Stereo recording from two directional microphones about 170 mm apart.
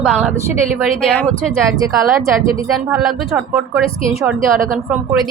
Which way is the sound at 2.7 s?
Centre (ahead or behind).